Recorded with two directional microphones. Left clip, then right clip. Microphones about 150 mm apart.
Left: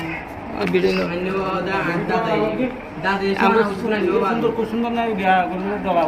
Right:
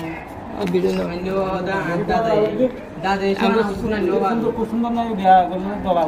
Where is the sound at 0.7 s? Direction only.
10° right (ahead or behind).